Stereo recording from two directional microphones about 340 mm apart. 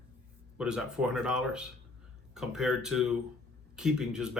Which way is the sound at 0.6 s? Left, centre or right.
Centre.